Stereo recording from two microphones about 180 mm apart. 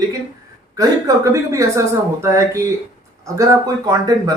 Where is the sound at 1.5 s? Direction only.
15° right (ahead or behind).